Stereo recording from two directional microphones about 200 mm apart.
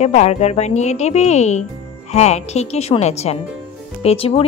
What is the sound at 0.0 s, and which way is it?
A woman's voice, 35° left (ahead or behind).